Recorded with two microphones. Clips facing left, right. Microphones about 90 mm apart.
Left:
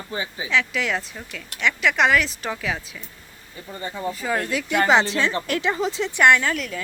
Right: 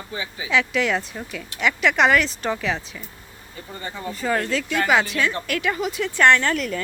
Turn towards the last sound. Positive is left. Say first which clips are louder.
# right 1 dB
turn(degrees=0)  # may be behind; listen again after turning